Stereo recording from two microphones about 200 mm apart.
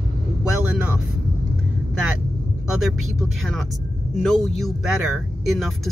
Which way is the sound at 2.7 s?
Centre (ahead or behind).